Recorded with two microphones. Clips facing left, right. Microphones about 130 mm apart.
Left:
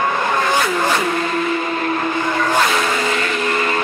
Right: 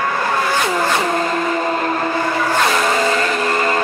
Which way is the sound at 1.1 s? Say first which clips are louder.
Right 1 dB; 40° right (ahead or behind).